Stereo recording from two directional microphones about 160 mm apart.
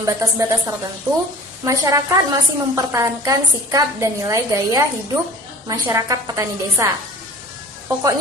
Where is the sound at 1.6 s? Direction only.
20° right (ahead or behind).